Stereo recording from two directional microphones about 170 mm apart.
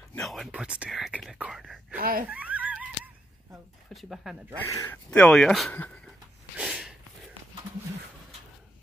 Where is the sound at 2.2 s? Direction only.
10° right (ahead or behind).